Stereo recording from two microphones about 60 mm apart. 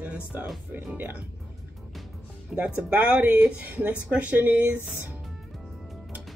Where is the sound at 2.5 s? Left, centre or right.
Right.